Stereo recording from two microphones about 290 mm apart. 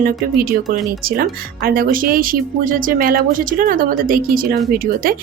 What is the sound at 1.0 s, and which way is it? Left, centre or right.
Speech, right.